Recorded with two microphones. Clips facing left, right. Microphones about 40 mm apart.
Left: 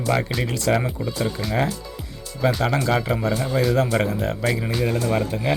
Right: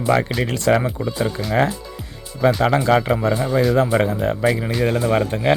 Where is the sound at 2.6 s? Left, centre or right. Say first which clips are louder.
Right 5 dB; right.